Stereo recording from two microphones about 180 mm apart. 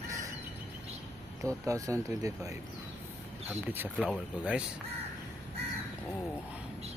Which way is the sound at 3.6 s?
10° right (ahead or behind).